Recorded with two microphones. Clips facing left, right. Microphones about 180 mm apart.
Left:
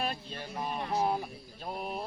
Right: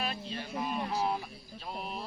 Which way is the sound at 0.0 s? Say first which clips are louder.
Left 1 dB; 45° left (ahead or behind).